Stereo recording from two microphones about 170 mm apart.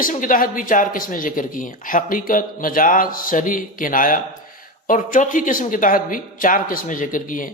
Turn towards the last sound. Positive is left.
turn(degrees=50)  # may be behind; listen again after turning